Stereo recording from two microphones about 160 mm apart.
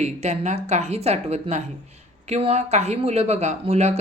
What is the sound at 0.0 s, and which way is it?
Speech, 45° right (ahead or behind).